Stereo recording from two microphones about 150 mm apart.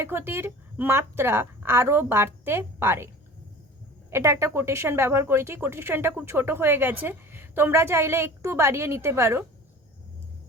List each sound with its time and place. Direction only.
0.0 s a woman's voice: 15° right (ahead or behind)
4.1 s a woman's voice: 20° right (ahead or behind)